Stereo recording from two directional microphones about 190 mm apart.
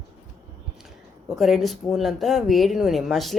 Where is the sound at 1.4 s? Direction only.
Centre (ahead or behind).